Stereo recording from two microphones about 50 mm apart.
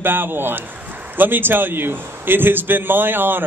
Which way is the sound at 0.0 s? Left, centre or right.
Right.